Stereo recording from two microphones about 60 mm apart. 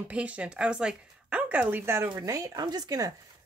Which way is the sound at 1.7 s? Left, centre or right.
Right.